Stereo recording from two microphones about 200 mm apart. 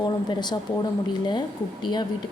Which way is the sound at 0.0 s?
20° left (ahead or behind).